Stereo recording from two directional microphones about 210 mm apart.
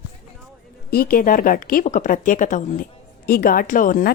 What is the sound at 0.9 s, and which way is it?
A woman's voice, 45° left (ahead or behind).